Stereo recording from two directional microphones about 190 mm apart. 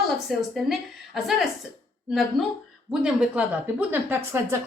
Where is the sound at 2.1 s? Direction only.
Centre (ahead or behind).